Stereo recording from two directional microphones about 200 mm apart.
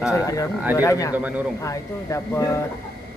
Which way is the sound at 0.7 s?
15° left (ahead or behind).